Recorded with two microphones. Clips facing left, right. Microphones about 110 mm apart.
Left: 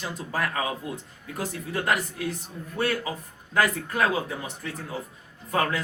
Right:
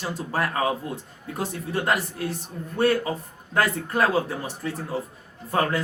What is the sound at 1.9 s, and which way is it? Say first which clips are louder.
A man's voice: even; 35° right (ahead or behind).